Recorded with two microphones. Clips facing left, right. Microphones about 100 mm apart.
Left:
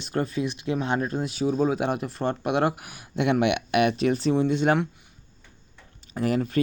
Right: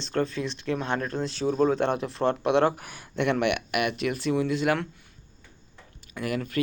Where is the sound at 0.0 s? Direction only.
10° left (ahead or behind); by 4.9 s 25° left (ahead or behind).